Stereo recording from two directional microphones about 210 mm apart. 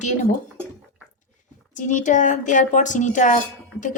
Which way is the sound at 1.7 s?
35° left (ahead or behind).